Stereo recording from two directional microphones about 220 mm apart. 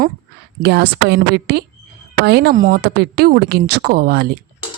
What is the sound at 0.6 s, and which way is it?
Speech, 50° right (ahead or behind).